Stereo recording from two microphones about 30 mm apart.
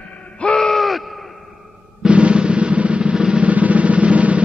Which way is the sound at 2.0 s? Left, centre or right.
Right.